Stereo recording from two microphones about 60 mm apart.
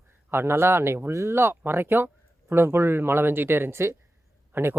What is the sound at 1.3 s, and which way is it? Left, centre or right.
Speech, right.